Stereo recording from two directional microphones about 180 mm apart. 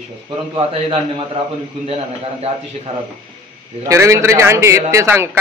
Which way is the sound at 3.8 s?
15° right (ahead or behind).